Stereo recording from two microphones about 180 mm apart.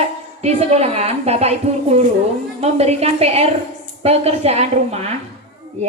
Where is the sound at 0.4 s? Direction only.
35° right (ahead or behind).